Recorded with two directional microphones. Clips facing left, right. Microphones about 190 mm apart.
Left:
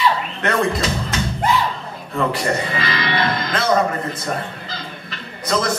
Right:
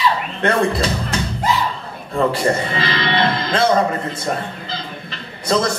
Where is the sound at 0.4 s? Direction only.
30° right (ahead or behind).